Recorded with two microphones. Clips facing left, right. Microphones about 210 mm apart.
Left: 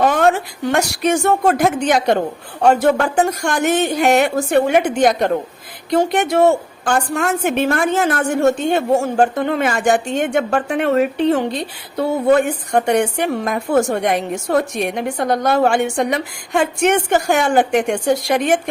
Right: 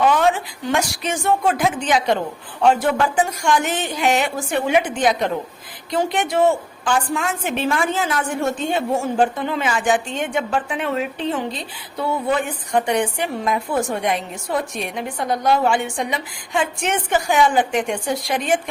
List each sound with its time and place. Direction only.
0.0 s a sound: 50° left (ahead or behind)
0.8 s a woman's voice: 50° left (ahead or behind)
1.6 s a woman's voice: 45° left (ahead or behind)
3.4 s a woman's voice: 60° left (ahead or behind)
6.0 s a woman's voice: 65° left (ahead or behind)
6.5 s a woman's voice: 45° left (ahead or behind)
7.3 s a woman's voice: 55° left (ahead or behind)
10.7 s a woman's voice: 60° left (ahead or behind)
12.1 s a woman's voice: 45° left (ahead or behind); by 17.9 s 65° left (ahead or behind)
18.1 s a woman's voice: 45° left (ahead or behind)